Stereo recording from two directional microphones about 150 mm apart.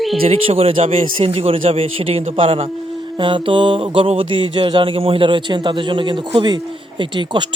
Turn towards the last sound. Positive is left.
turn(degrees=-30)  # may be behind; listen again after turning